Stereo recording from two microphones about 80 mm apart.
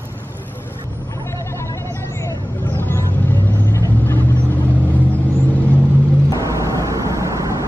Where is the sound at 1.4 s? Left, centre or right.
Left.